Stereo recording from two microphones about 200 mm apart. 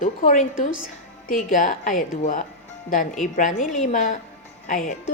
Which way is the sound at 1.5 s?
40° left (ahead or behind).